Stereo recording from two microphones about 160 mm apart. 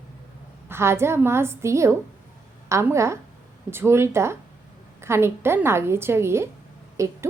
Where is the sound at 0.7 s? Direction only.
15° right (ahead or behind).